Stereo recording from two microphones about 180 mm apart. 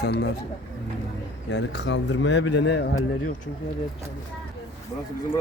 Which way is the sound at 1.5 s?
70° left (ahead or behind).